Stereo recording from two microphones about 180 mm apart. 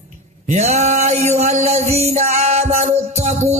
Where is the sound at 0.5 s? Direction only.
40° right (ahead or behind).